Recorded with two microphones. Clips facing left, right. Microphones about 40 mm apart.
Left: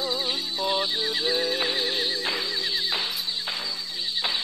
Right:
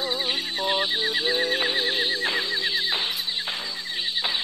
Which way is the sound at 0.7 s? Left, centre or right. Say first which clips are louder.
Right 1 dB; right.